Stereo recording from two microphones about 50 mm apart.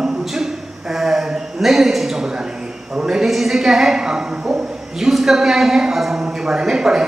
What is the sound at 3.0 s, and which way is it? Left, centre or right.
Speech, centre.